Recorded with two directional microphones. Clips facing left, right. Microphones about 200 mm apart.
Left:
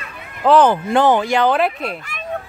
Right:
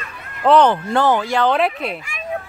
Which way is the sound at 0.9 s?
15° left (ahead or behind).